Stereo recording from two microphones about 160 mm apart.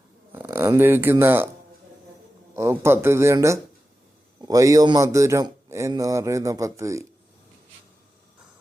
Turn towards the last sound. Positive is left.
turn(degrees=-20)  # may be behind; listen again after turning